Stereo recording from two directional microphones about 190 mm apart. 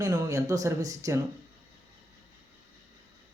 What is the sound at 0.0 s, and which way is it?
Speech, 20° right (ahead or behind).